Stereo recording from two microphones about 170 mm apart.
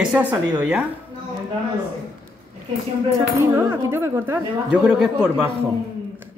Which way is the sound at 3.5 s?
15° right (ahead or behind).